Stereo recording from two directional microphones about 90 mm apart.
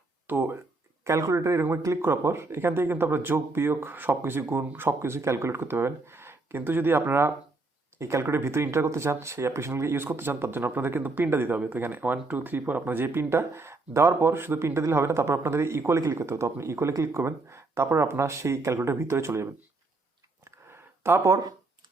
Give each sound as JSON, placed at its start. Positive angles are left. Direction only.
{"t": 0.3, "sound": "speech", "side_deg": -25}
{"t": 1.0, "sound": "speech", "side_deg": -35}
{"t": 20.4, "sound": "a sound", "side_deg": -30}